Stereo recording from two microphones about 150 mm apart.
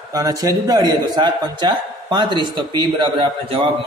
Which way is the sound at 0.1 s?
25° right (ahead or behind).